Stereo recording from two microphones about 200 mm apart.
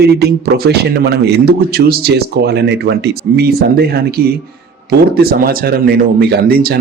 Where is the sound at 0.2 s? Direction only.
55° right (ahead or behind).